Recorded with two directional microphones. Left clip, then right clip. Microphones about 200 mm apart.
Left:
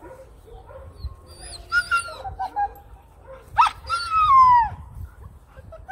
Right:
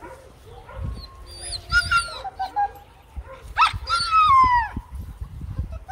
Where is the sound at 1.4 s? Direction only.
30° left (ahead or behind).